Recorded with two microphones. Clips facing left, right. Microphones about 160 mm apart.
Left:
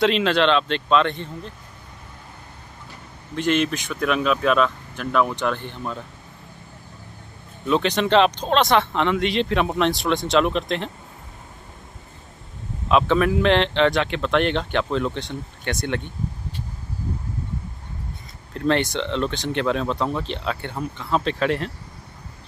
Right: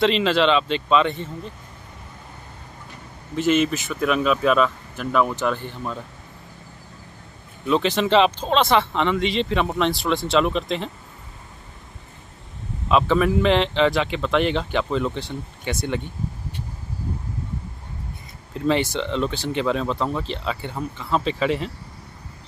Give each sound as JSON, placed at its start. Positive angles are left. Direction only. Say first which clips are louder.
{"t": 0.0, "sound": "speech", "louder": "even", "side_deg": 0}
{"t": 3.3, "sound": "speech", "louder": "right 2 dB", "side_deg": -5}
{"t": 7.6, "sound": "speech", "louder": "even", "side_deg": 0}
{"t": 12.8, "sound": "speech", "louder": "even", "side_deg": 0}
{"t": 18.5, "sound": "speech", "louder": "even", "side_deg": -5}